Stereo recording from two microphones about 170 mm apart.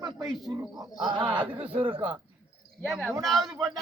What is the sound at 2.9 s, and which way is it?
Speech, centre (ahead or behind).